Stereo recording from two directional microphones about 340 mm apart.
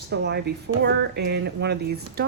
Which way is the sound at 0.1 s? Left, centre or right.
Right.